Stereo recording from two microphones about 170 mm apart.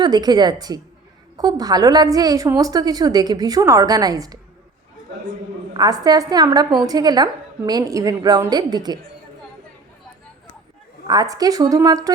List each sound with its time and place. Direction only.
0.0 s a woman's voice: 25° right (ahead or behind)
5.7 s a woman's voice: 25° right (ahead or behind)
11.0 s a woman's voice: 25° right (ahead or behind)